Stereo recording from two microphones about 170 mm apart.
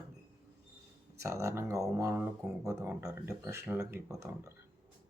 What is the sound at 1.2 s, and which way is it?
Speech, 15° right (ahead or behind).